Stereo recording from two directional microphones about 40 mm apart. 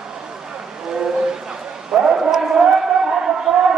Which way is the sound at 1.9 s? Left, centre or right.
Centre.